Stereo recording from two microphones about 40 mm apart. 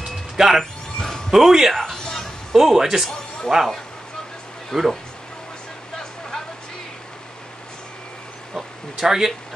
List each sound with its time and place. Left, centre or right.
0.4 s speech: centre
0.9 s a sound: centre
1.3 s speech: centre
1.7 s speech: centre
2.0 s music: centre
2.5 s speech: centre
4.7 s speech: centre
8.5 s a sound: centre